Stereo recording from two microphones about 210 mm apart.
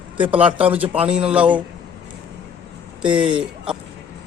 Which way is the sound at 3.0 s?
5° right (ahead or behind).